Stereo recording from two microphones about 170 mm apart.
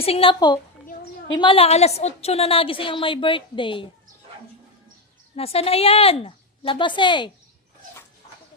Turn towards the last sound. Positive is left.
turn(degrees=30)  # may be behind; listen again after turning